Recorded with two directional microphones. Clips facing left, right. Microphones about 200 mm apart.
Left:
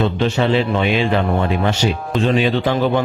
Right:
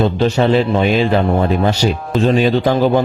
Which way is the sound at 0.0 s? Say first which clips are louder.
Right 3 dB; 40° right (ahead or behind).